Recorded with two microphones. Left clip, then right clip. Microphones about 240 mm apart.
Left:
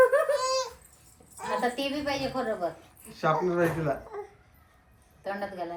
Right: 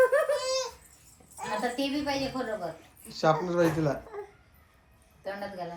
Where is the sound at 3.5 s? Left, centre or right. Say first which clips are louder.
Right 1 dB; centre.